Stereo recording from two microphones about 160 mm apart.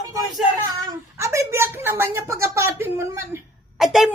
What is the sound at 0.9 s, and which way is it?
Speech, 20° right (ahead or behind).